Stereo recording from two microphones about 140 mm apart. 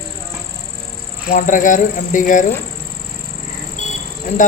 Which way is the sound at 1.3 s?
65° left (ahead or behind).